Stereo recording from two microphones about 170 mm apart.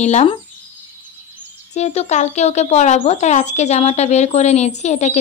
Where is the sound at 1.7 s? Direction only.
40° left (ahead or behind).